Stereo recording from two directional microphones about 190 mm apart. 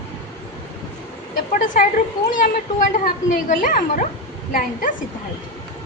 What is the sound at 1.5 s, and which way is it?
A woman's voice, 45° left (ahead or behind).